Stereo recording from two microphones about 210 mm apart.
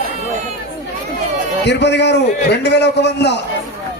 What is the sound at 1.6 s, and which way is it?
A man's voice, 55° left (ahead or behind).